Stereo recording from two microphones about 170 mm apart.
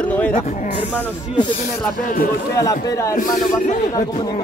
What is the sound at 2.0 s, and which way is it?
Speech, 55° left (ahead or behind).